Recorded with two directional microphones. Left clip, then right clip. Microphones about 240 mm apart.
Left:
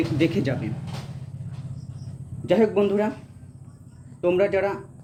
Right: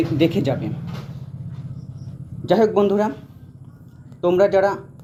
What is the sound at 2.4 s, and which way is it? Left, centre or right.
Speech, right.